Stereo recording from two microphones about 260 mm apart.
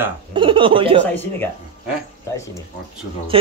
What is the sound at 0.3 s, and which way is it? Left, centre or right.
Speech, centre.